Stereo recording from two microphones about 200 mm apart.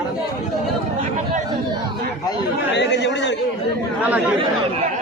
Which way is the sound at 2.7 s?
60° left (ahead or behind).